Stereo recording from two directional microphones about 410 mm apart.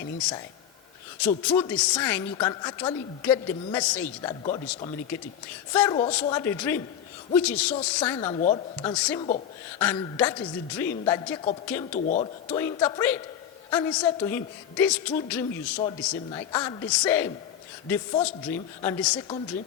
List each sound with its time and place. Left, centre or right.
1.5 s a woman's voice: centre
11.9 s a woman's voice: centre